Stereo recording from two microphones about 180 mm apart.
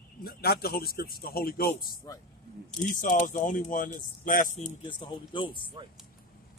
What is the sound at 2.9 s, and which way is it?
Speech, 50° left (ahead or behind).